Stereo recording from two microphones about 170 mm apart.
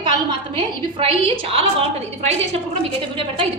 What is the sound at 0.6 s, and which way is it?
A woman's voice, 30° right (ahead or behind).